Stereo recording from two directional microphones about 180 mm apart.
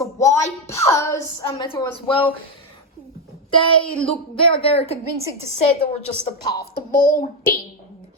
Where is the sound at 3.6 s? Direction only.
30° left (ahead or behind).